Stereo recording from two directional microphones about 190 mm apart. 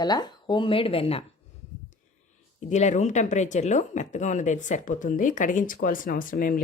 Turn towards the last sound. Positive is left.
turn(degrees=50)  # may be behind; listen again after turning